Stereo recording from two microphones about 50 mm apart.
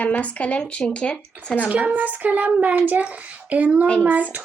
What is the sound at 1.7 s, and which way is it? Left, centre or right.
Speech, right.